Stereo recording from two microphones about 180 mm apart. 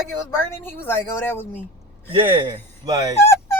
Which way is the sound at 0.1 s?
10° left (ahead or behind).